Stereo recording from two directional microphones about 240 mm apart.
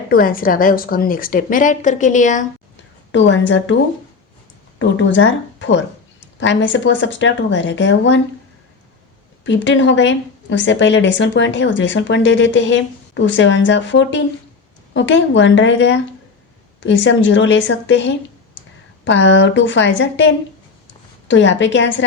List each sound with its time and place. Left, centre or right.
0.1 s a woman's voice: left
3.1 s speech: left
4.8 s speech: left
9.4 s speech: left